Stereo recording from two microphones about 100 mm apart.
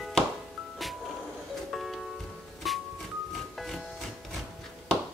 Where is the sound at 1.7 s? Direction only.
Centre (ahead or behind).